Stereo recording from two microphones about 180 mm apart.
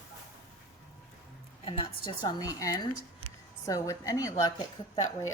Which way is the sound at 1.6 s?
30° left (ahead or behind).